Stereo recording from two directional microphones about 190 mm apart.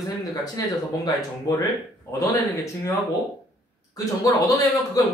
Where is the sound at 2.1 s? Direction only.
15° left (ahead or behind).